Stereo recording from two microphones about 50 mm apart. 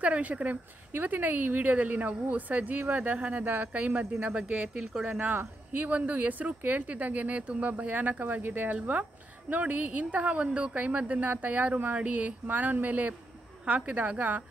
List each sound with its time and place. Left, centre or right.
0.0 s speech: right
5.3 s speech: right